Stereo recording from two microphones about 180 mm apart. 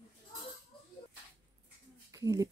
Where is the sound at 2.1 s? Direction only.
20° right (ahead or behind).